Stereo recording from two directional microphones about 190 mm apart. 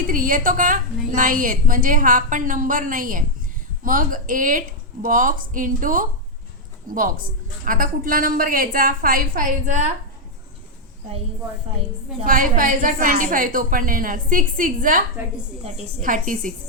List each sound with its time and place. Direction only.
0.0 s a woman's voice: 45° right (ahead or behind)
12.2 s a woman's voice: 45° right (ahead or behind)